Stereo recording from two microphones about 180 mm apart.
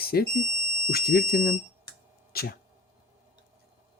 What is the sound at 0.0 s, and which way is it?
Smoke detector, 60° left (ahead or behind).